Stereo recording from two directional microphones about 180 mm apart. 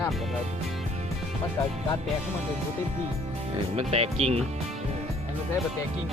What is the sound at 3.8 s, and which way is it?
Speech, 35° right (ahead or behind).